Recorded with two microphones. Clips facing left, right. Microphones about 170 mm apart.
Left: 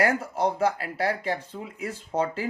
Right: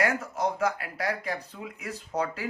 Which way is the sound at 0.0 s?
30° left (ahead or behind).